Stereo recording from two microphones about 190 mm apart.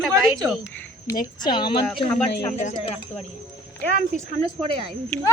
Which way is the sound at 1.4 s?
25° left (ahead or behind).